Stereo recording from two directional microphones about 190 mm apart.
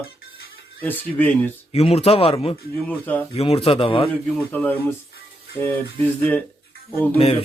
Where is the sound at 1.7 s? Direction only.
35° left (ahead or behind).